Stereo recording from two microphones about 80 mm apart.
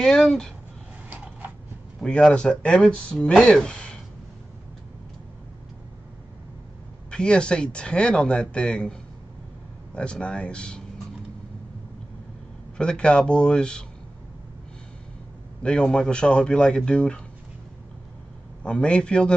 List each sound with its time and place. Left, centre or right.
0.0 s speech: centre
1.1 s a sound: centre
2.0 s speech: centre
7.1 s speech: centre
9.9 s speech: centre
12.7 s speech: centre
15.6 s speech: centre
18.6 s speech: centre